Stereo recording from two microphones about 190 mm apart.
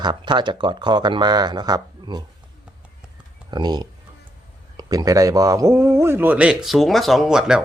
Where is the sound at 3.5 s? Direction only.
20° right (ahead or behind); by 7.6 s 5° right (ahead or behind).